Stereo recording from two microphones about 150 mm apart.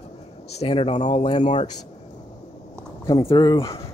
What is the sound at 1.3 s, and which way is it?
Speech, 30° left (ahead or behind).